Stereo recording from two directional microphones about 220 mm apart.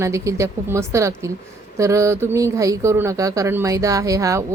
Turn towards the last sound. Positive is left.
turn(degrees=-15)  # may be behind; listen again after turning